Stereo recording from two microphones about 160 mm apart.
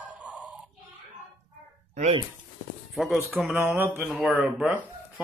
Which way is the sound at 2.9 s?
Centre (ahead or behind).